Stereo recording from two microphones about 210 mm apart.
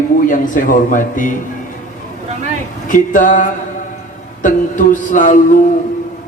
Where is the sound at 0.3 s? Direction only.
40° left (ahead or behind).